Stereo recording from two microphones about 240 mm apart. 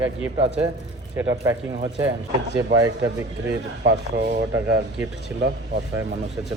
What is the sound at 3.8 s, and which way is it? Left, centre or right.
Speech, right.